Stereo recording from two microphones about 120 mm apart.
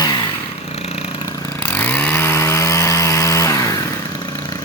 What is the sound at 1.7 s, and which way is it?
Chainsaw, 15° left (ahead or behind).